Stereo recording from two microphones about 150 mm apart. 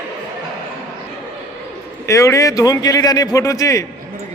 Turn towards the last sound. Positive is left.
turn(degrees=20)  # may be behind; listen again after turning